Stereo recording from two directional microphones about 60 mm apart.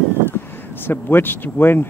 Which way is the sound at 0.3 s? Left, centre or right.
Left.